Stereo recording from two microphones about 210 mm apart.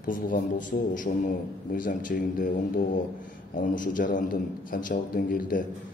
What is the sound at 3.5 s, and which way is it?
A man's voice, 40° left (ahead or behind).